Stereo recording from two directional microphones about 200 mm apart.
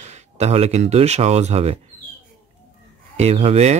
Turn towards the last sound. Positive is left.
turn(degrees=-30)  # may be behind; listen again after turning